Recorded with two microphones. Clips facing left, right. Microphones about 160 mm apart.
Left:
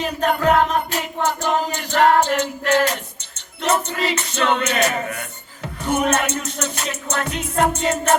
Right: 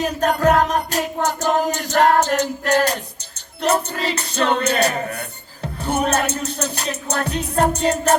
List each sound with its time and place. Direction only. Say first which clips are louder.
0.0 s music: right 2 dB; 40° right (ahead or behind)